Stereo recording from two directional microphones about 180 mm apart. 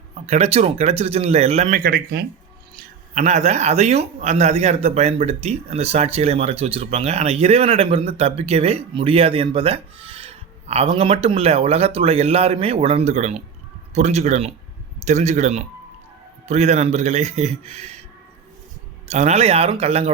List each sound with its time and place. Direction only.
0.1 s speech: 35° right (ahead or behind)
1.7 s speech: 60° right (ahead or behind)
2.7 s speech: 40° right (ahead or behind)
19.0 s speech: 35° right (ahead or behind)